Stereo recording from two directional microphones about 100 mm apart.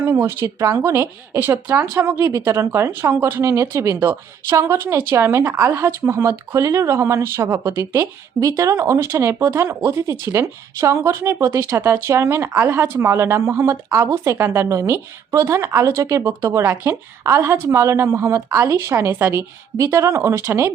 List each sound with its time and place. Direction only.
0.0 s speech: 20° right (ahead or behind)